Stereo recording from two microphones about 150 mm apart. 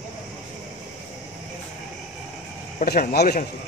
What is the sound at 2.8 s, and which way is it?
Speech, 85° left.